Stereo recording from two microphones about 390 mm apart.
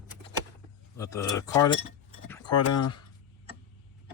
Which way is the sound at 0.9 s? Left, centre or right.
Centre.